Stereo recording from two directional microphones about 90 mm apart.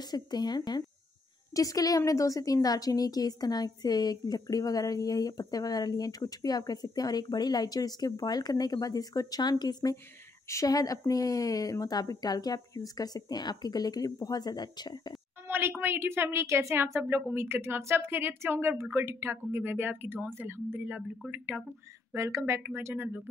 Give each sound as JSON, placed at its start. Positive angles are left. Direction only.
{"t": 0.0, "sound": "a woman's voice", "side_deg": 50}
{"t": 15.4, "sound": "a woman's voice", "side_deg": -25}
{"t": 22.1, "sound": "a woman's voice", "side_deg": -30}